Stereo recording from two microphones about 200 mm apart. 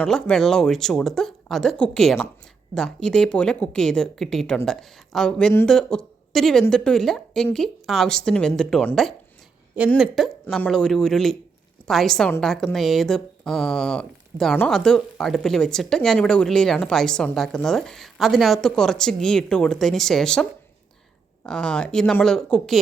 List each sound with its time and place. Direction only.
0.0 s speech: 5° left (ahead or behind)